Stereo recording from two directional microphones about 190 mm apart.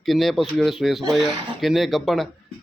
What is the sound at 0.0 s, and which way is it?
A man's voice, centre (ahead or behind).